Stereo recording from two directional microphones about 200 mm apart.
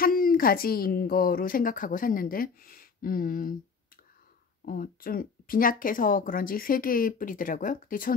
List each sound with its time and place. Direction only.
0.0 s a woman's voice: 45° left (ahead or behind)
4.6 s a woman's voice: 45° left (ahead or behind)